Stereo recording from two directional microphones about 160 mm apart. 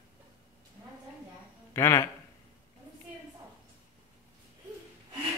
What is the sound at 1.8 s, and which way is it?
Speech, 20° left (ahead or behind).